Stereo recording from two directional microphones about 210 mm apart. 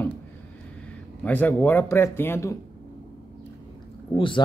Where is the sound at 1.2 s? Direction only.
10° left (ahead or behind).